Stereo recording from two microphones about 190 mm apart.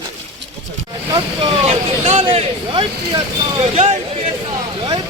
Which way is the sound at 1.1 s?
25° right (ahead or behind).